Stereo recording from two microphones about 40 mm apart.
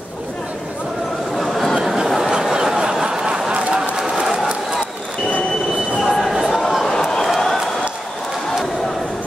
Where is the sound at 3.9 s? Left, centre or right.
Centre.